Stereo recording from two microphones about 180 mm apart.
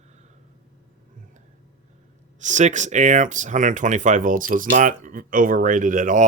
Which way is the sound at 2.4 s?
45° right (ahead or behind).